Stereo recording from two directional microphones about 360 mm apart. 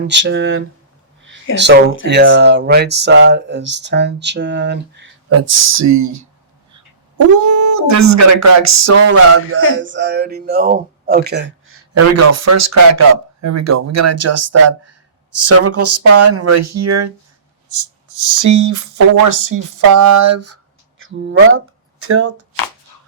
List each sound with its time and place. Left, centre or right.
0.1 s speech: right
5.4 s speech: right
18.1 s speech: right